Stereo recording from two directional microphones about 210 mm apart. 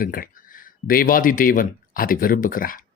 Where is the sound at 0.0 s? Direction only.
45° left (ahead or behind).